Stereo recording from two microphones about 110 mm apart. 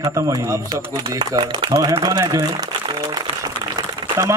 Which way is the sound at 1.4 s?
45° right (ahead or behind).